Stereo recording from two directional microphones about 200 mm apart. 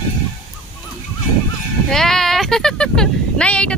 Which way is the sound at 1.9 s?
Centre (ahead or behind).